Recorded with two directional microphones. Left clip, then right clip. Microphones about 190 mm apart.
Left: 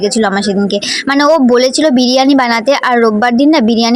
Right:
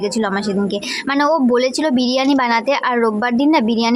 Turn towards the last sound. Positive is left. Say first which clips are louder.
# left 5 dB
turn(degrees=25)  # may be behind; listen again after turning